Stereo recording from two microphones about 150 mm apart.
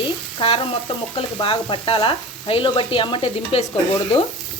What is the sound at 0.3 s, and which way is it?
Sizzle, 40° left (ahead or behind).